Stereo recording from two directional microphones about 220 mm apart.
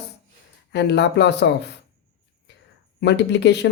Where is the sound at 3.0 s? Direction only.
50° left (ahead or behind).